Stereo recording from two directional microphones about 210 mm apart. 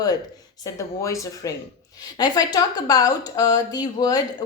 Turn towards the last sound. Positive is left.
turn(degrees=20)  # may be behind; listen again after turning